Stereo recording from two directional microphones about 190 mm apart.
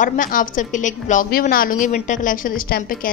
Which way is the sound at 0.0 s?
45° left (ahead or behind).